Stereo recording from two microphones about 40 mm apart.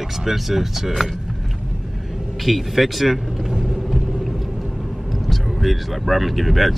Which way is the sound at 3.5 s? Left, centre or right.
Centre.